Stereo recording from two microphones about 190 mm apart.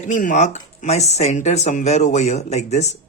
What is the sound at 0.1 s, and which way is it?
Speech, 40° left (ahead or behind).